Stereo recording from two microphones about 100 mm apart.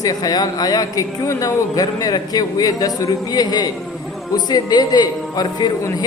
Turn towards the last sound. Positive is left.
turn(degrees=45)  # may be behind; listen again after turning